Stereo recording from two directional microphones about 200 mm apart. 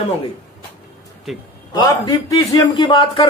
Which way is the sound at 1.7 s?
20° left (ahead or behind).